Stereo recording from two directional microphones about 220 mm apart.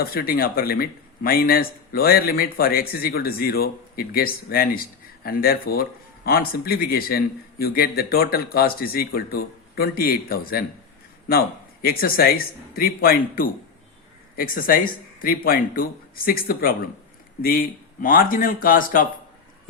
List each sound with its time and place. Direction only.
0.0 s speech: 40° left (ahead or behind)